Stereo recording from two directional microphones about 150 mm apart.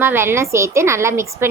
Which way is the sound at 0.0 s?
15° right (ahead or behind).